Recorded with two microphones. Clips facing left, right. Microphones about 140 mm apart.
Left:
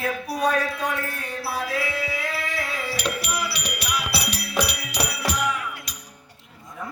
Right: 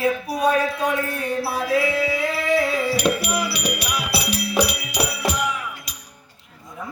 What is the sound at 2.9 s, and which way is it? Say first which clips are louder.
Music: right 6 dB; 15° right (ahead or behind).